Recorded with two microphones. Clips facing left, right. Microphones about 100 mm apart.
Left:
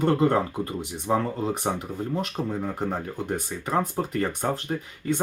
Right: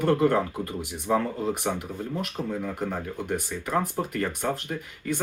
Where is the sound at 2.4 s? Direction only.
30° left (ahead or behind).